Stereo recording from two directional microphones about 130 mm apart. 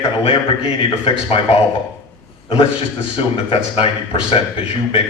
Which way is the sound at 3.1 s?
45° left (ahead or behind).